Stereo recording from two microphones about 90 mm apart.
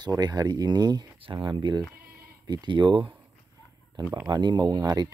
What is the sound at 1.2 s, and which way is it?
Speech, 60° right (ahead or behind).